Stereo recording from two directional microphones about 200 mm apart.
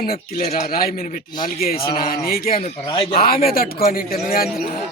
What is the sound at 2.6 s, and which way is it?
Speech, 25° left (ahead or behind).